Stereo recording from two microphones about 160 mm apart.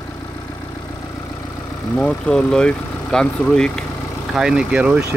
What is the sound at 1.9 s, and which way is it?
Speech, 5° left (ahead or behind).